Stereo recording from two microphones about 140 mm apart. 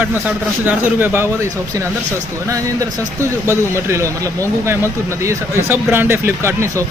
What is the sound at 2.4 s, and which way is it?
A woman's voice, 25° right (ahead or behind).